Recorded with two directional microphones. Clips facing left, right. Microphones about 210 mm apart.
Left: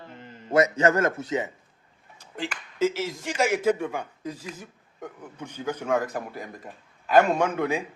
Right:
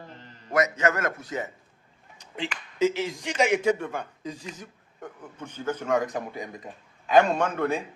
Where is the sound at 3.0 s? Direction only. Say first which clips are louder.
Right 1 dB; centre (ahead or behind).